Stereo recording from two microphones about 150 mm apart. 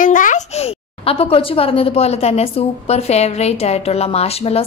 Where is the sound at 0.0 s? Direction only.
60° left (ahead or behind).